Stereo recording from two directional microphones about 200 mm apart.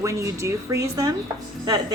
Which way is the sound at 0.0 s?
15° right (ahead or behind).